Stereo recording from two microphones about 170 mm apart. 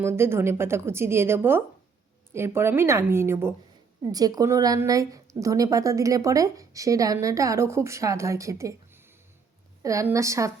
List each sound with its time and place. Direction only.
0.0 s a woman's voice: 15° right (ahead or behind)